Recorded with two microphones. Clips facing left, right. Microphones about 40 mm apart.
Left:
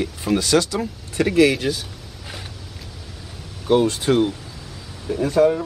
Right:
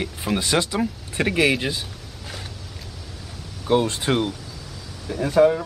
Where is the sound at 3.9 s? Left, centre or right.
Centre.